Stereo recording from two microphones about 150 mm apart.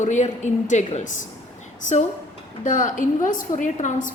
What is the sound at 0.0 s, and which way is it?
Speech, 55° left (ahead or behind).